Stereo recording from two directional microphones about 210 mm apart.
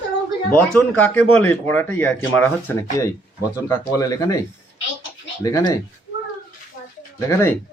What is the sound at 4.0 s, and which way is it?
Speech, 15° left (ahead or behind).